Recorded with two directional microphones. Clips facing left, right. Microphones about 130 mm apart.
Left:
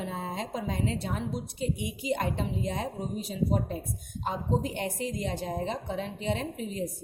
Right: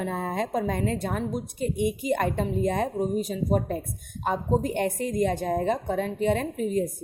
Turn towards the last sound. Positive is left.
turn(degrees=-45)  # may be behind; listen again after turning